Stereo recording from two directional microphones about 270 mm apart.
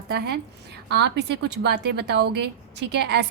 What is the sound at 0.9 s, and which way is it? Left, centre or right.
A woman's voice, right.